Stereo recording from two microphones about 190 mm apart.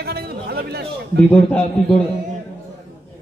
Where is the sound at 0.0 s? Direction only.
55° right (ahead or behind).